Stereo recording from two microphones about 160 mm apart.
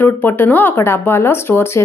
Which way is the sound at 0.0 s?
10° left (ahead or behind).